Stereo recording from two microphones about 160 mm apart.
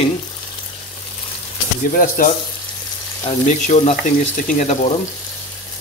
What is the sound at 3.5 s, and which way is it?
Speech, 50° left (ahead or behind).